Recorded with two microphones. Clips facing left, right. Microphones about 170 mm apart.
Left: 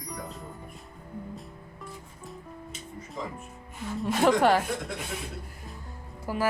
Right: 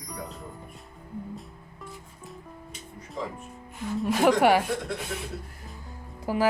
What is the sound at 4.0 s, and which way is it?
Speech, 5° right (ahead or behind).